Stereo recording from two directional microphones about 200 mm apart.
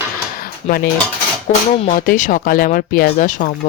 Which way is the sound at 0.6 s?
50° left (ahead or behind).